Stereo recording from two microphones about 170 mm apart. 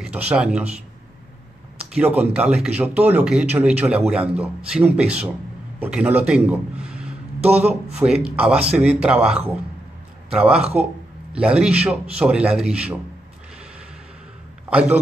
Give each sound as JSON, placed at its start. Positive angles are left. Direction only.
{"t": 0.3, "sound": "speech", "side_deg": -5}
{"t": 1.9, "sound": "a man's voice", "side_deg": -10}
{"t": 7.3, "sound": "speech", "side_deg": -40}
{"t": 8.0, "sound": "speech", "side_deg": -5}
{"t": 14.7, "sound": "a man's voice", "side_deg": -5}